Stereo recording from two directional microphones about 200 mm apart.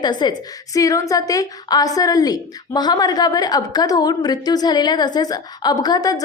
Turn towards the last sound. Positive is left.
turn(degrees=20)  # may be behind; listen again after turning